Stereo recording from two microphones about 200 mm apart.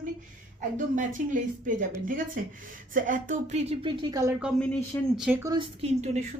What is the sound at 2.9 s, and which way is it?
Speech, 40° right (ahead or behind).